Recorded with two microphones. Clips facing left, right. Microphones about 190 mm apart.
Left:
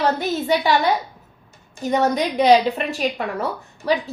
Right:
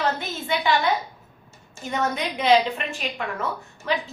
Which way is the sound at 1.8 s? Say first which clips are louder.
Left 7 dB; 40° left (ahead or behind).